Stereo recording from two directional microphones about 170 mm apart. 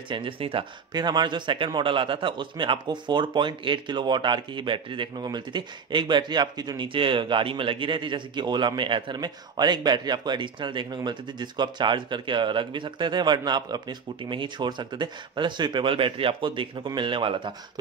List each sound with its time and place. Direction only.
0.1 s speech: 30° right (ahead or behind)